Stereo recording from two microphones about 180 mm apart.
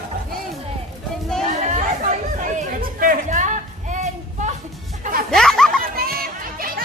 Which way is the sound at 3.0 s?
50° right (ahead or behind).